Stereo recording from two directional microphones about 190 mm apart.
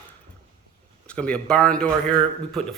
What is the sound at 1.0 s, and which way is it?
A man's voice, 5° left (ahead or behind).